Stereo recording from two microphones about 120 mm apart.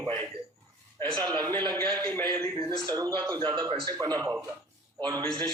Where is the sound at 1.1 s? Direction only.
35° right (ahead or behind).